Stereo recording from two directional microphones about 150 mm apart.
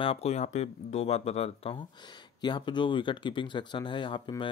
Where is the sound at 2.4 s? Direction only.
30° left (ahead or behind).